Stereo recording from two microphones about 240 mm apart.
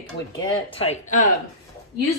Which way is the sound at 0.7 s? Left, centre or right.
Left.